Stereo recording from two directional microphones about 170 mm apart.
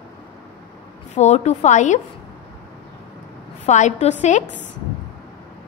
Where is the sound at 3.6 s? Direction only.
45° left (ahead or behind).